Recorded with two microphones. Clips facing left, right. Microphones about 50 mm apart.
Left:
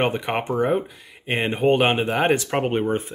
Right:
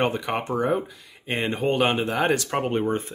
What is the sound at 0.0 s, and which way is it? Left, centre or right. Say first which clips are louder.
Speech: left 2 dB; left.